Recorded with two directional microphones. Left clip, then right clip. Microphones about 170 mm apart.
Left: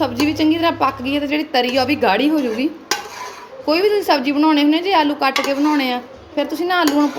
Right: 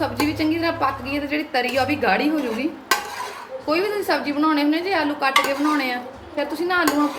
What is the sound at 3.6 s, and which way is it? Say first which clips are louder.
Speech: left 6 dB; 60° left (ahead or behind).